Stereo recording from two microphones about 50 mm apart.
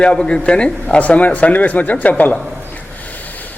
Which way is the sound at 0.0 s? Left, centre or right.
Centre.